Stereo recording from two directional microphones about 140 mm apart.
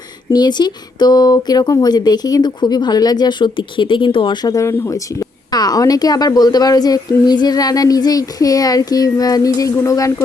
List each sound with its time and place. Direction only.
0.3 s a woman's voice: 30° left (ahead or behind)